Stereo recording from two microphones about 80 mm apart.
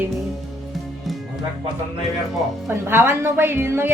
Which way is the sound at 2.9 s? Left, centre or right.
Right.